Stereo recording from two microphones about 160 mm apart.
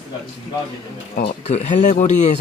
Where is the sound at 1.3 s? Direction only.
45° left (ahead or behind).